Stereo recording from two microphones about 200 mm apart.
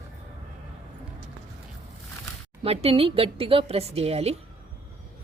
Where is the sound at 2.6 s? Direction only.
30° right (ahead or behind).